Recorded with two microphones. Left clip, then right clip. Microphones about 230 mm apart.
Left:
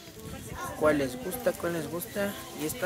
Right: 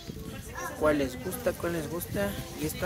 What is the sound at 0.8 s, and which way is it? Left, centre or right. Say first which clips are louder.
Speech: left 1 dB; centre.